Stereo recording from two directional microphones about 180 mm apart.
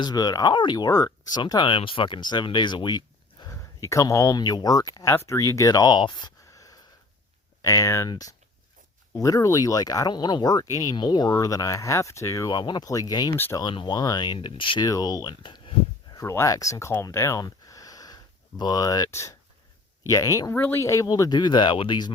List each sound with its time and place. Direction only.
0.0 s speech: 20° left (ahead or behind)